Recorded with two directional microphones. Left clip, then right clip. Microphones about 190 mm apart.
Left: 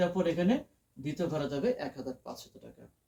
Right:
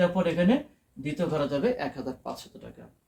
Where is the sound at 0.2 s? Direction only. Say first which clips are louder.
Right 5 dB; 5° right (ahead or behind).